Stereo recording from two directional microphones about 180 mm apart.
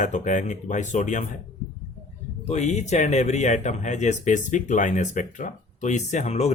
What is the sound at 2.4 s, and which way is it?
Speech, 40° left (ahead or behind).